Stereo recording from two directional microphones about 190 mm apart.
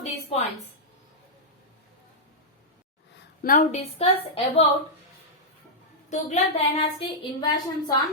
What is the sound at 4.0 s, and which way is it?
Speech, 30° left (ahead or behind).